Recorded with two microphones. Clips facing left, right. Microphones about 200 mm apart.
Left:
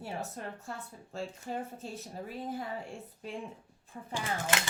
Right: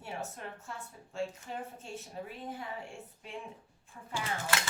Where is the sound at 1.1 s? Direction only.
40° left (ahead or behind).